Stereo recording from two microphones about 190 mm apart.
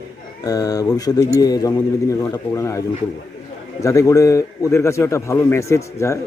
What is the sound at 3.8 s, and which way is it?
A man's voice, 15° left (ahead or behind).